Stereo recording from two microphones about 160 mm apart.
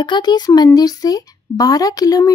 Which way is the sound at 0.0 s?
25° left (ahead or behind).